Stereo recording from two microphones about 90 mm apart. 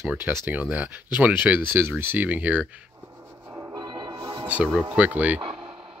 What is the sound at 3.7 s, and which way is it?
Music, 55° right (ahead or behind).